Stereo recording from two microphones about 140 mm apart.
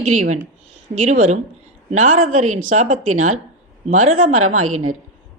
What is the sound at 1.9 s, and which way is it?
A woman's voice, 55° right (ahead or behind).